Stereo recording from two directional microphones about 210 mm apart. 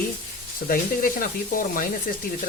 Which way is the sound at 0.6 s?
40° left (ahead or behind).